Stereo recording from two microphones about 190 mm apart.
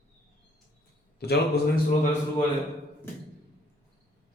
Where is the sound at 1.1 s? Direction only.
60° left (ahead or behind).